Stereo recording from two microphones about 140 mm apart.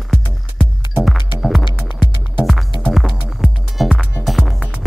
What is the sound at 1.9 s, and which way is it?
Music, 35° left (ahead or behind).